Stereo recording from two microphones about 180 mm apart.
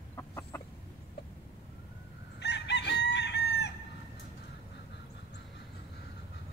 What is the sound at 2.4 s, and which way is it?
Chicken, 75° left (ahead or behind).